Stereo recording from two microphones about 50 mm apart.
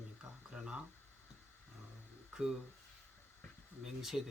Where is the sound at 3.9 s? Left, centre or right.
Centre.